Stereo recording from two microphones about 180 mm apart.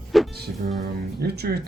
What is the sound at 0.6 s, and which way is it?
Music, 50° right (ahead or behind).